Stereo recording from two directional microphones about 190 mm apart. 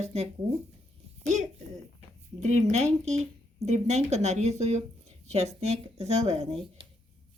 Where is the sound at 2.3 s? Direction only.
35° right (ahead or behind).